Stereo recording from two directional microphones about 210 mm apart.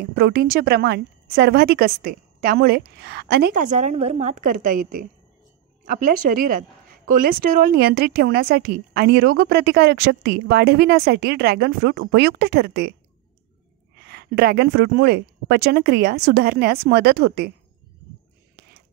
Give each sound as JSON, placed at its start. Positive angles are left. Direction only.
{"t": 0.1, "sound": "a woman's voice", "side_deg": -50}
{"t": 14.0, "sound": "a woman's voice", "side_deg": -50}